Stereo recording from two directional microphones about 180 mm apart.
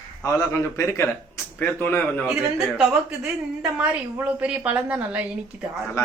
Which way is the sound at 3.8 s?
10° right (ahead or behind).